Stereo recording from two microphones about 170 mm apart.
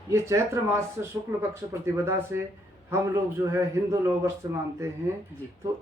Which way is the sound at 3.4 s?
15° right (ahead or behind).